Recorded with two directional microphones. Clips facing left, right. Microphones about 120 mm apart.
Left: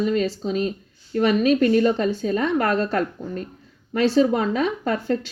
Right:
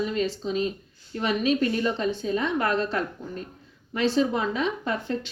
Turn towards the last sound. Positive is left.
turn(degrees=40)  # may be behind; listen again after turning